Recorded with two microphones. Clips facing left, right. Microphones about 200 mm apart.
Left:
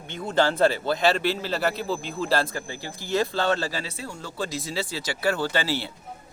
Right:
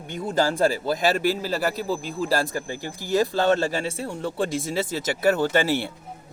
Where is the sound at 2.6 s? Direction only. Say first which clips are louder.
Right 4 dB; 45° right (ahead or behind).